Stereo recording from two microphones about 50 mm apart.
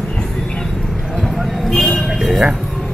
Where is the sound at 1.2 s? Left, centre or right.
Centre.